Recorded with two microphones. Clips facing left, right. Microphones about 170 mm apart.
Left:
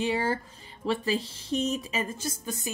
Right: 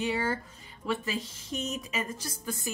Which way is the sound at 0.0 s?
30° left (ahead or behind).